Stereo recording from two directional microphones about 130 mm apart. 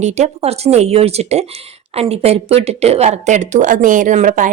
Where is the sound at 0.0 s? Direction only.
60° right (ahead or behind).